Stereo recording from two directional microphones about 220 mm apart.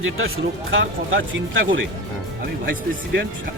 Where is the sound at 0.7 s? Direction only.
60° right (ahead or behind).